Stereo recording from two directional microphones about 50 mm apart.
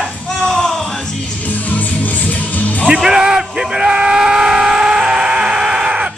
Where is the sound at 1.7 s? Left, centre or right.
Left.